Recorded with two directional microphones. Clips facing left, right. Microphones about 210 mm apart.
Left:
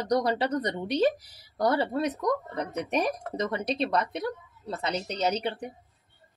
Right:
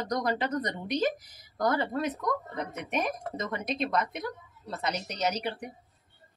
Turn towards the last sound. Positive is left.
turn(degrees=30)  # may be behind; listen again after turning